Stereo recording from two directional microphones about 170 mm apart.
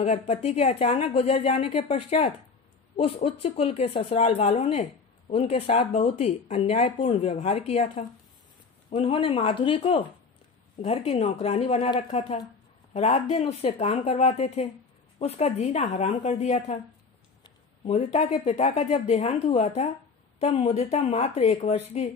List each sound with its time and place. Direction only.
0.0 s speech: 40° left (ahead or behind)
3.3 s speech: 35° left (ahead or behind)
17.4 s speech: 35° left (ahead or behind)